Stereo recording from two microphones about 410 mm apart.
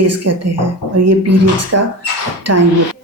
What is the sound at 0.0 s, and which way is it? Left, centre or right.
A woman's voice, right.